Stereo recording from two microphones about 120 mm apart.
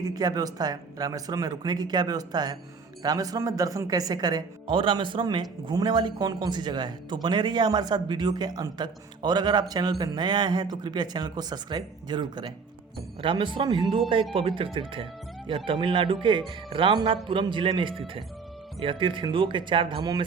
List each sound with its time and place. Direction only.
0.0 s a man's voice: 35° right (ahead or behind)
4.7 s a man's voice: 45° right (ahead or behind)